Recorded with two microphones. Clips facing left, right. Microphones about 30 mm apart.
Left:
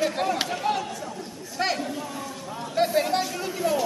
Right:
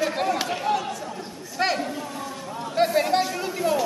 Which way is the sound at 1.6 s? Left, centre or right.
Centre.